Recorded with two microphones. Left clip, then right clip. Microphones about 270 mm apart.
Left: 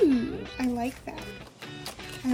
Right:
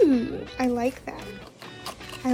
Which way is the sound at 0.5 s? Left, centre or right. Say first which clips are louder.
Right 7 dB; centre.